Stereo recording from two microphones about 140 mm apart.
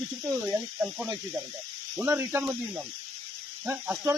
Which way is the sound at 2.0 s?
15° right (ahead or behind).